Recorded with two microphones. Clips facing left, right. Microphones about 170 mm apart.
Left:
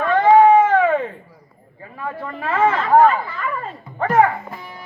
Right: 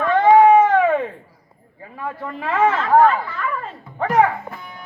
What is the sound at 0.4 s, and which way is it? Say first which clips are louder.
Baby cry: even; 20° right (ahead or behind).